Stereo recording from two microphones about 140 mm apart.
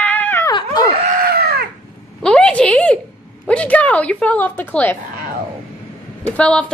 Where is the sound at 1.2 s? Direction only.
90° right.